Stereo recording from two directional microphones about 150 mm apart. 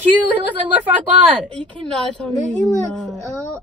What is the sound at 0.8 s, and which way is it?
Speech, 10° right (ahead or behind).